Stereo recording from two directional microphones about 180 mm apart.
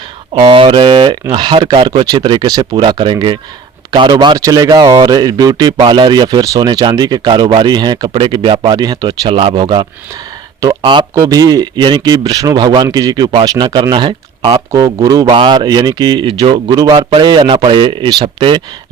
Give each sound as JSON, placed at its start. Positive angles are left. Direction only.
{"t": 0.3, "sound": "speech", "side_deg": -25}